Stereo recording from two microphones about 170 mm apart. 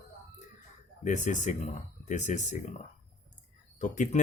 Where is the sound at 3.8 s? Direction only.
45° left (ahead or behind).